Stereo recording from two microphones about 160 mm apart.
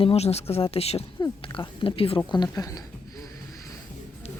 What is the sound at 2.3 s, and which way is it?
Speech, 25° left (ahead or behind).